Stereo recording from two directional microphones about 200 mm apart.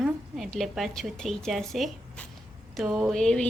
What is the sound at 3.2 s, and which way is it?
Speech, 5° left (ahead or behind).